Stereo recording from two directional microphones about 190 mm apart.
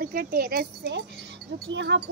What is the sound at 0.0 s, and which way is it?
Speech, 50° right (ahead or behind).